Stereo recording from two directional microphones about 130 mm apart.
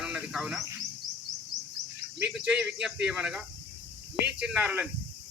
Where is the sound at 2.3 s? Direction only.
5° right (ahead or behind).